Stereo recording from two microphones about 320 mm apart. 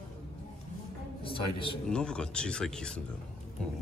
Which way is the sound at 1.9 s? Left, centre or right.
Centre.